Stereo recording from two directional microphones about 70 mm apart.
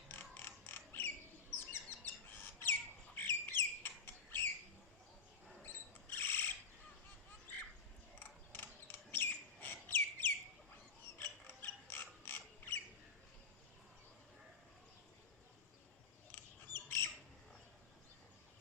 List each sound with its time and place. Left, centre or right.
0.1 s mechanisms: left
1.5 s chirp: left
3.2 s bird: left
5.6 s cricket: left
8.2 s a sound: left
11.2 s ratchet: left
16.3 s squawk: left